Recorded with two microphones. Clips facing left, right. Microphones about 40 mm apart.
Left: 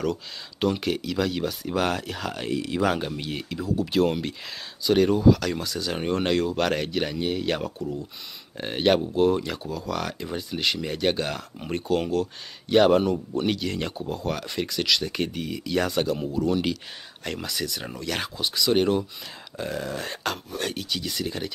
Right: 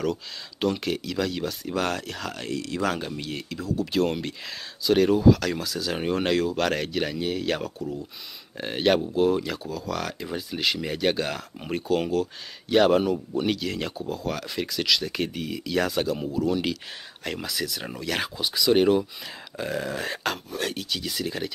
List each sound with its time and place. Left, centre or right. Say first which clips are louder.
0.0 s speech: even; centre